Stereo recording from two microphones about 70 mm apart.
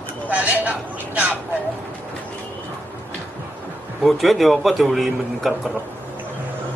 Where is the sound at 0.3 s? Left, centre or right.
Right.